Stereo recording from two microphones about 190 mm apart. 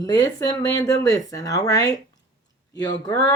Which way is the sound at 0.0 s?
20° left (ahead or behind).